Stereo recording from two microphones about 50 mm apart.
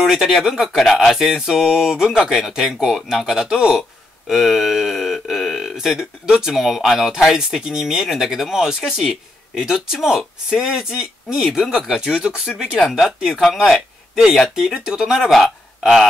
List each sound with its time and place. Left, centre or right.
0.0 s speech: centre
11.9 s speech: centre
14.5 s speech: centre